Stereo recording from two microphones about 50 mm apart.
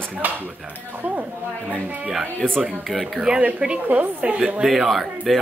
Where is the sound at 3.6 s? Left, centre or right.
Right.